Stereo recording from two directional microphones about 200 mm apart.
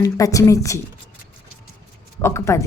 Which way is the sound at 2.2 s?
15° left (ahead or behind).